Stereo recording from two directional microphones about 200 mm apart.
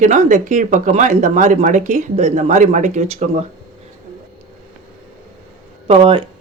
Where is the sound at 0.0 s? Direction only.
35° right (ahead or behind).